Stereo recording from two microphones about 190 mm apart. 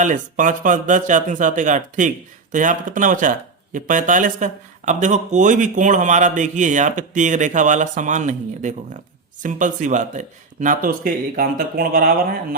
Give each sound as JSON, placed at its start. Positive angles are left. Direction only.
{"t": 0.0, "sound": "a man's voice", "side_deg": -40}